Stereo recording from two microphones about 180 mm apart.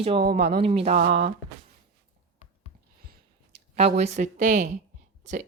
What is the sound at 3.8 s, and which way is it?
Speech, 35° right (ahead or behind).